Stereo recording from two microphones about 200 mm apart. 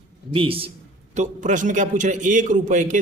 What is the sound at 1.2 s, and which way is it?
A man's voice, 40° right (ahead or behind).